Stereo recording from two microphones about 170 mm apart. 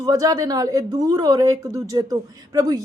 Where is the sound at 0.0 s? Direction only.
20° right (ahead or behind).